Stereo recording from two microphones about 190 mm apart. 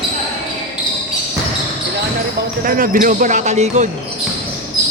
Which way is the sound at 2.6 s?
50° right (ahead or behind).